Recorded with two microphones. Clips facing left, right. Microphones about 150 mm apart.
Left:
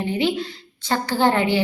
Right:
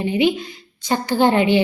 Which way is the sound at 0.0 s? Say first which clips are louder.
Right 4 dB; 15° right (ahead or behind).